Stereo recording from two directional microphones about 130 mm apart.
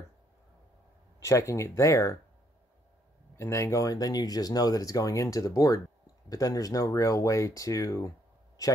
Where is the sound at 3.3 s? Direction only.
20° left (ahead or behind).